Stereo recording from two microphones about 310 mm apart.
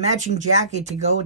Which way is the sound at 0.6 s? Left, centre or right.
Right.